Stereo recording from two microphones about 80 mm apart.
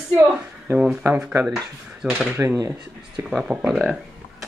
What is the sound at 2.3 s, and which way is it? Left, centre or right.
Speech, right.